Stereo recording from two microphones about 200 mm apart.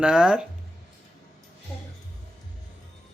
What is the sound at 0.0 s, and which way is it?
Speech, 5° right (ahead or behind).